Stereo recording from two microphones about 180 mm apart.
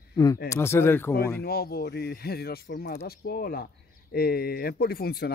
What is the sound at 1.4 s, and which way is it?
Speech, 60° left (ahead or behind).